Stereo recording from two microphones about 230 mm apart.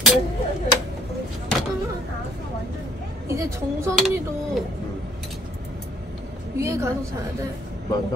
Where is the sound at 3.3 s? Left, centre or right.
Centre.